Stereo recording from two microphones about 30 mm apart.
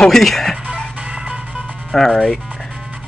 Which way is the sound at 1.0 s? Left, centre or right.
Right.